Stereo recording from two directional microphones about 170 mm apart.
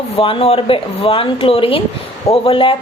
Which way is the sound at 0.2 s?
35° left (ahead or behind).